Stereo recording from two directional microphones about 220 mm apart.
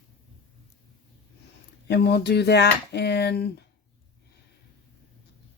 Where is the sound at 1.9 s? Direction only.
50° left (ahead or behind).